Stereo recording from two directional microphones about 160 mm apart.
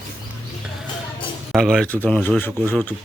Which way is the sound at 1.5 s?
5° left (ahead or behind).